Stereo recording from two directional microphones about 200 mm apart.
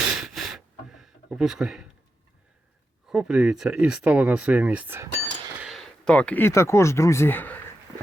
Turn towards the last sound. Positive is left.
turn(degrees=10)  # may be behind; listen again after turning